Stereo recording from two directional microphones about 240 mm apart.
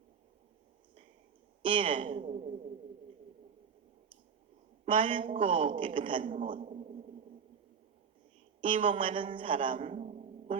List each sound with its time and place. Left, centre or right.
1.6 s a woman's voice: right
4.9 s a woman's voice: right
6.2 s a man's voice: right
8.9 s a woman's voice: right
9.7 s a sound: right